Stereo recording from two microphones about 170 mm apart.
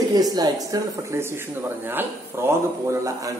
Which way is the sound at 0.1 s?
20° right (ahead or behind).